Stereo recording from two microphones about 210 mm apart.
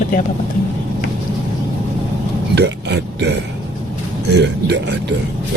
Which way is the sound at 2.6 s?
55° right (ahead or behind).